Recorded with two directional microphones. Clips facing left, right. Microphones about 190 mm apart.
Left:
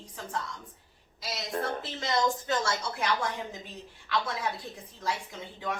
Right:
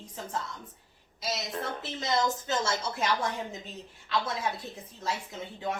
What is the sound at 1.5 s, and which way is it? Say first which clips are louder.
Speech: left 8 dB; 45° left (ahead or behind).